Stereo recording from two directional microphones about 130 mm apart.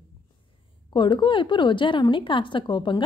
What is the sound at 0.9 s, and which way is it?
A woman's voice, 35° left (ahead or behind).